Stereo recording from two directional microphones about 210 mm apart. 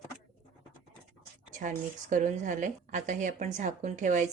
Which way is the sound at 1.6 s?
35° right (ahead or behind).